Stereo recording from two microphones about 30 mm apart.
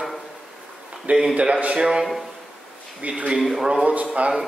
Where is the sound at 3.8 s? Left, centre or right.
Right.